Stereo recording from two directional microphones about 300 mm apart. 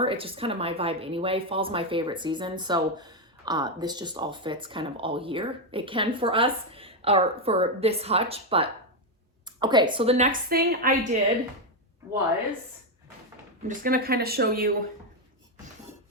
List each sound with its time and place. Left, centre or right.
0.0 s a woman's voice: centre
13.7 s a woman's voice: right